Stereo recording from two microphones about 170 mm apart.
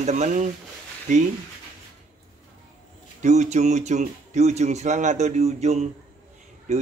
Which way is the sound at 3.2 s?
45° right (ahead or behind).